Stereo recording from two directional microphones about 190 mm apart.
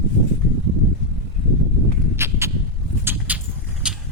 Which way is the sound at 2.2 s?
15° right (ahead or behind).